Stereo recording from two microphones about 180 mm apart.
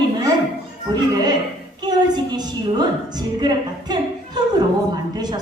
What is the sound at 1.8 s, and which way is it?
A woman's voice, 25° right (ahead or behind).